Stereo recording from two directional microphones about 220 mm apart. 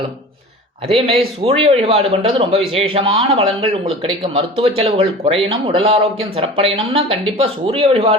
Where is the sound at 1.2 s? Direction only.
25° right (ahead or behind).